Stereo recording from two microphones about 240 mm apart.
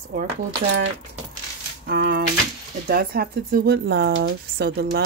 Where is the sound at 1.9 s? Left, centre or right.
Right.